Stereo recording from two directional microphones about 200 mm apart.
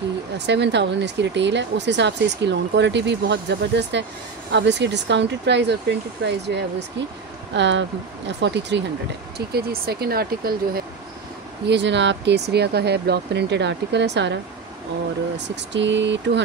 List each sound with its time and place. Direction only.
0.5 s speech: 60° right (ahead or behind)
11.6 s speech: 60° right (ahead or behind)